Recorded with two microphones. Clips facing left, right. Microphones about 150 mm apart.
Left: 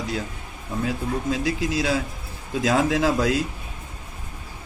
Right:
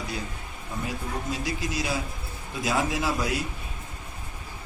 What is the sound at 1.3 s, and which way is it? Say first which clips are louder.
Speech: left 6 dB; 90° left.